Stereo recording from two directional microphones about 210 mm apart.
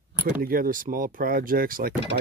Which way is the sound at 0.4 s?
45° right (ahead or behind).